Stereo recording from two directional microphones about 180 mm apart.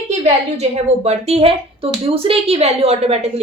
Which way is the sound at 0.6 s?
35° right (ahead or behind).